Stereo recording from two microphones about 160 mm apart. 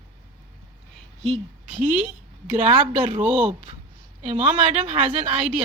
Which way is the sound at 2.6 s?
40° right (ahead or behind).